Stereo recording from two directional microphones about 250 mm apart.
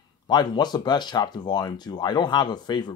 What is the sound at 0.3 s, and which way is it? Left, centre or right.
Speech, centre.